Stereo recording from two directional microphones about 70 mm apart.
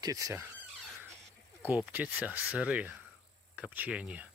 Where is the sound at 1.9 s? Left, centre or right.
Right.